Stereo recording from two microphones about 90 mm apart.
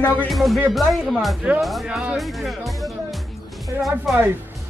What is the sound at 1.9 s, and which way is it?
Speech, 15° right (ahead or behind).